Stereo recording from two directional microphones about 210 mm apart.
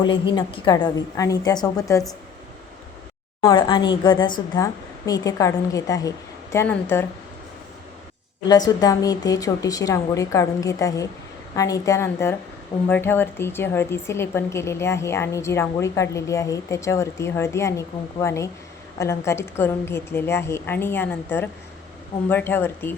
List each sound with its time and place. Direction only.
0.0 s a woman's voice: 20° left (ahead or behind)
3.4 s a woman's voice: 20° left (ahead or behind)
8.4 s a woman's voice: 20° left (ahead or behind)